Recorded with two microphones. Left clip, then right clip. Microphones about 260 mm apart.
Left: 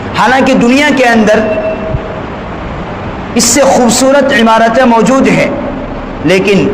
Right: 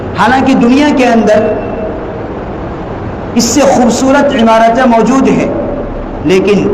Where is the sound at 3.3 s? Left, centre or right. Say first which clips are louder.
Left 1 dB; left.